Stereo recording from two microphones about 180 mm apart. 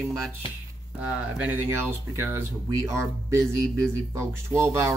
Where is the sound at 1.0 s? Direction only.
5° right (ahead or behind).